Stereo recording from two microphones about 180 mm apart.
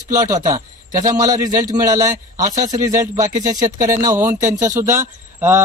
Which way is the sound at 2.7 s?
20° right (ahead or behind).